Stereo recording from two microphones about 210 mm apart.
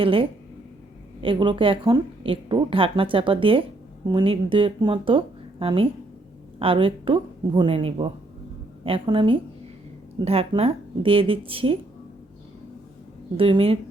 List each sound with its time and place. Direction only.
0.0 s a woman's voice: 25° right (ahead or behind)
13.3 s a woman's voice: 25° right (ahead or behind)